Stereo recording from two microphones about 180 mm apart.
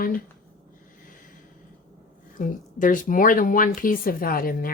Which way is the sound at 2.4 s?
45° left (ahead or behind).